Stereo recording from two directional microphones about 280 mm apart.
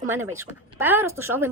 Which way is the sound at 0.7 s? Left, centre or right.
Centre.